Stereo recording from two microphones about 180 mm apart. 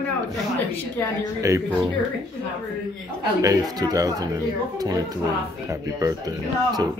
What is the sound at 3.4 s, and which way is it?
Speech, 20° right (ahead or behind).